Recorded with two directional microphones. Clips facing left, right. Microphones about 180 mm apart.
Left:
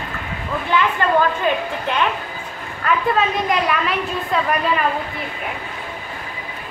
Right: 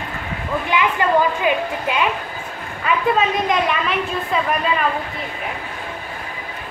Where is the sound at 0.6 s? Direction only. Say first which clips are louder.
Left 1 dB; 15° right (ahead or behind).